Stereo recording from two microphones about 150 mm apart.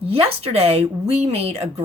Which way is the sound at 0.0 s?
40° right (ahead or behind).